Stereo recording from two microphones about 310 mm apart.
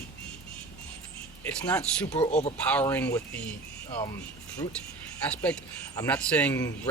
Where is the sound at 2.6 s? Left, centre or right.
Centre.